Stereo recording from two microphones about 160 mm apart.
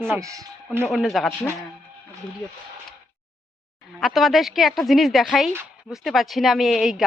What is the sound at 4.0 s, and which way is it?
A woman's voice, centre (ahead or behind).